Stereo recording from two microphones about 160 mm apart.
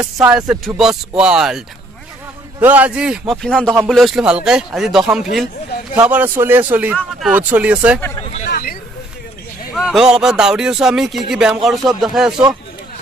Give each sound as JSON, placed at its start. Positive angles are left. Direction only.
{"t": 0.0, "sound": "a man's voice", "side_deg": -10}
{"t": 0.4, "sound": "music", "side_deg": -20}
{"t": 0.7, "sound": "speech", "side_deg": -5}
{"t": 2.6, "sound": "a man's voice", "side_deg": -10}
{"t": 3.4, "sound": "a man's voice", "side_deg": 5}
{"t": 8.5, "sound": "a sound", "side_deg": 65}
{"t": 9.8, "sound": "speech", "side_deg": -5}